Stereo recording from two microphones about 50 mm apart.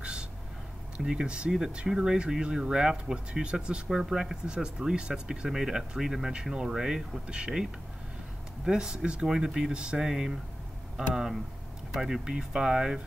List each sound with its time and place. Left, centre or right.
0.0 s a sound: centre
0.9 s speech: centre
8.6 s speech: centre